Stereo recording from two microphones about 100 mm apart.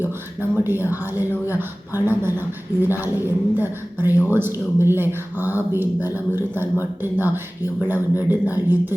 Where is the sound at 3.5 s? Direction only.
20° right (ahead or behind).